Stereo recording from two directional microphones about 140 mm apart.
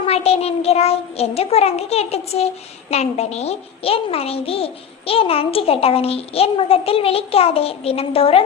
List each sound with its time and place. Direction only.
0.0 s a child's voice: 45° left (ahead or behind)